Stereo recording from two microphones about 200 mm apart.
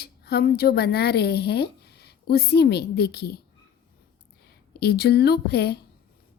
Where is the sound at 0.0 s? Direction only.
50° left (ahead or behind).